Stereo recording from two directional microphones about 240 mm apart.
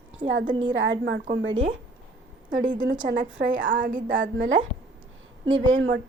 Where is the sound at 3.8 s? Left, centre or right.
Right.